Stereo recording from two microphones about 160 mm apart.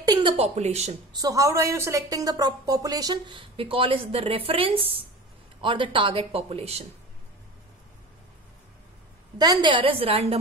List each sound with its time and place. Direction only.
0.1 s a woman's voice: 35° right (ahead or behind)
1.1 s a woman's voice: 20° right (ahead or behind); by 6.8 s 40° right (ahead or behind)
9.4 s speech: 25° right (ahead or behind)